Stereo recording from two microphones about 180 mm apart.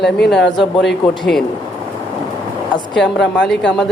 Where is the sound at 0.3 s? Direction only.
Centre (ahead or behind).